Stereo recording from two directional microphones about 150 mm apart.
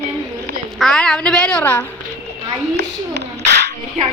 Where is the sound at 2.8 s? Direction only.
90° right.